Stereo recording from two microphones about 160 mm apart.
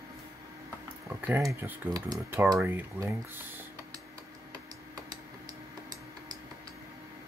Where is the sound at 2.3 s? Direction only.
15° right (ahead or behind).